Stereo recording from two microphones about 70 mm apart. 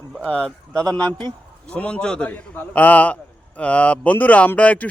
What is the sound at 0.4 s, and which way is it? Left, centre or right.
A man's voice, centre.